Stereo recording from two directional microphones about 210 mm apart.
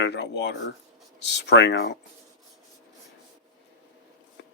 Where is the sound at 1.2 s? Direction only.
55° left (ahead or behind).